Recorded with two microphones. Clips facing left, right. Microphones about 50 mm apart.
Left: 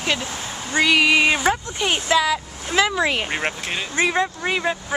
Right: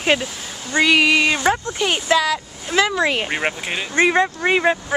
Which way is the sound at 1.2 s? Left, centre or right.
Centre.